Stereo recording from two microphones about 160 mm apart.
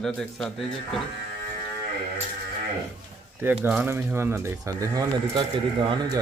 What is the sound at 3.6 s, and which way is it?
Speech, 10° right (ahead or behind).